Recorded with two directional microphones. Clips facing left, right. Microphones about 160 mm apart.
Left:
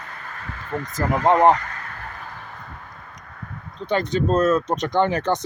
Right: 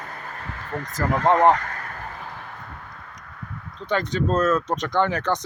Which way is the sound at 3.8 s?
25° left (ahead or behind).